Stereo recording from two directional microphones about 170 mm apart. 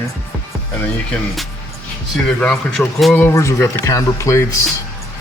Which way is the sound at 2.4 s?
Centre (ahead or behind).